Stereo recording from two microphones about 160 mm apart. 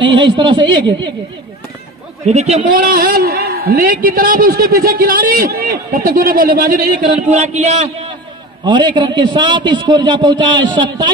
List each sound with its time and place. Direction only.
0.0 s a man's voice: 30° right (ahead or behind)
2.2 s a man's voice: 45° right (ahead or behind)
2.8 s a man's voice: 60° right (ahead or behind); by 7.9 s 45° right (ahead or behind)
8.6 s a man's voice: 30° right (ahead or behind)